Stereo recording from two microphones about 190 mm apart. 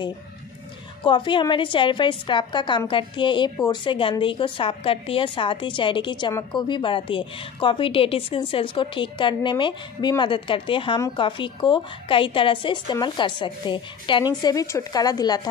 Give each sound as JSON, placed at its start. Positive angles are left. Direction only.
{"t": 1.0, "sound": "a woman's voice", "side_deg": 25}